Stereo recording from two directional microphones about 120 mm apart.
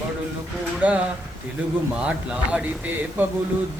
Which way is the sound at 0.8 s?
10° right (ahead or behind).